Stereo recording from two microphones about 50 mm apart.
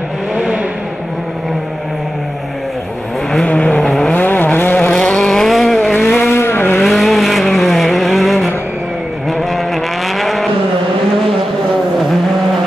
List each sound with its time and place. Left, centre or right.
3.4 s vehicle: left
4.1 s vehicle: left
4.8 s vehicle: left
5.5 s vehicle: centre
6.1 s vehicle: left
6.8 s vehicle: centre
10.1 s vehicle: centre